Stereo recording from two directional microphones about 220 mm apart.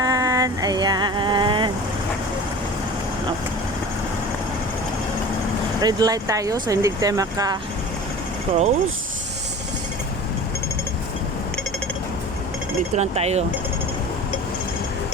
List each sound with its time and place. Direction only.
0.0 s vehicle: 15° right (ahead or behind)
5.8 s speech: 15° right (ahead or behind)
8.5 s speech: 30° right (ahead or behind)
13.0 s speech: 30° right (ahead or behind)